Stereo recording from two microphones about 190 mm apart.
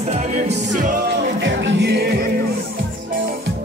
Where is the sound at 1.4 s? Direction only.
70° right (ahead or behind).